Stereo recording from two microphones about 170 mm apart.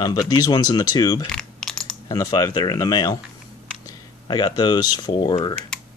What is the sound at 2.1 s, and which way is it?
Speech, 20° left (ahead or behind).